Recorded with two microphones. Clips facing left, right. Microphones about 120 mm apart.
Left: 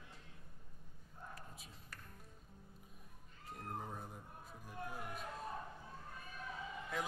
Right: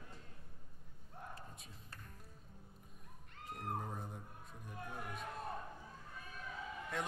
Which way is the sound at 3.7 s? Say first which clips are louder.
Even; centre (ahead or behind).